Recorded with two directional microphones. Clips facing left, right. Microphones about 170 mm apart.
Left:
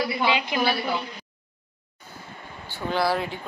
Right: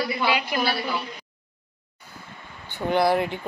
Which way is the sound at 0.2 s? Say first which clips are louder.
Even; 20° left (ahead or behind).